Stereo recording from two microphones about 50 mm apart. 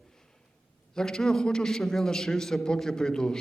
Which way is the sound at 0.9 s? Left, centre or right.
Centre.